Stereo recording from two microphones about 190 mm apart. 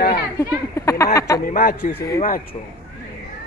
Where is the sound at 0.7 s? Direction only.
15° left (ahead or behind).